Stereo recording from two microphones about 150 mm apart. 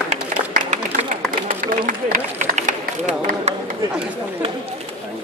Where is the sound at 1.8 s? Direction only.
70° right (ahead or behind).